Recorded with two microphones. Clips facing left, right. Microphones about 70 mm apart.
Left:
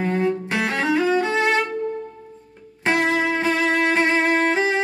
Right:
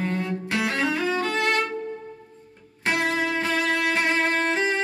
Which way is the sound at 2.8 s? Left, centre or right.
Left.